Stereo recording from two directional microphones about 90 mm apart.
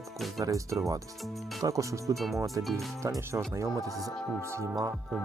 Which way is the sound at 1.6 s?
35° right (ahead or behind).